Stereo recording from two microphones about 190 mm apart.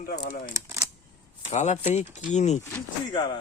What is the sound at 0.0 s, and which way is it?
Speech, 50° left (ahead or behind).